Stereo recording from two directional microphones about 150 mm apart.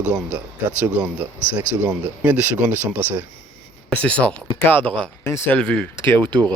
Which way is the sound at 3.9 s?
10° left (ahead or behind).